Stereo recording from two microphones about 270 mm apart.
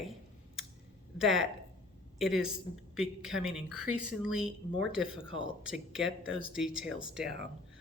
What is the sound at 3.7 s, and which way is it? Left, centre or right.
Speech, right.